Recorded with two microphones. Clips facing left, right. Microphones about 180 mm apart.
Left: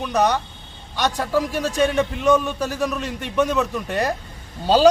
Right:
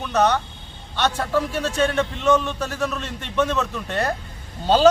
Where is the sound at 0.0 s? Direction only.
10° left (ahead or behind).